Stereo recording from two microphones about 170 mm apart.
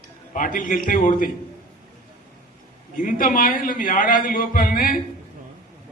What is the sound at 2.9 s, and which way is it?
A man's voice, 50° left (ahead or behind).